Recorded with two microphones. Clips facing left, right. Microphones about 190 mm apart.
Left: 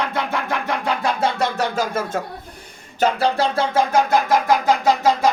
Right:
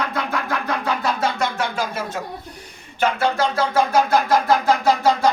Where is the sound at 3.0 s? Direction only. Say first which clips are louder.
Left 1 dB; 35° left (ahead or behind).